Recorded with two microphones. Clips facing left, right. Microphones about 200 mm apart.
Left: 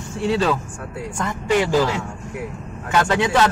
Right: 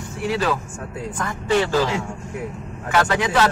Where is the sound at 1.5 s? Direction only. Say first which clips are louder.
Left 1 dB; 15° left (ahead or behind).